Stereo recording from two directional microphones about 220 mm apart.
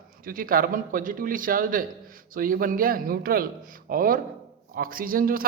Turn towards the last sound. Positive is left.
turn(degrees=-40)  # may be behind; listen again after turning